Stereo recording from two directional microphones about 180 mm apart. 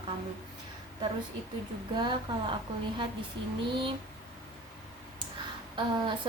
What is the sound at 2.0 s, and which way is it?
Speech, 25° right (ahead or behind).